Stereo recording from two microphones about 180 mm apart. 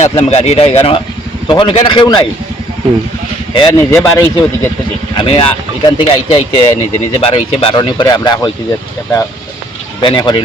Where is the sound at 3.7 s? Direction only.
15° left (ahead or behind).